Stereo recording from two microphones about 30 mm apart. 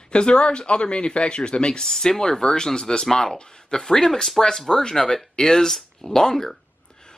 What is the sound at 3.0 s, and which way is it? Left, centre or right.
Speech, centre.